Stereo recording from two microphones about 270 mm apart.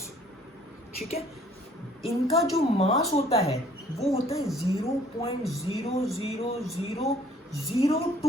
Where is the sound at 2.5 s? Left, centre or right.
Left.